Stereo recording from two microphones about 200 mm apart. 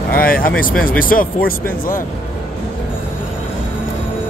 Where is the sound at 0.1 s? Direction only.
45° left (ahead or behind).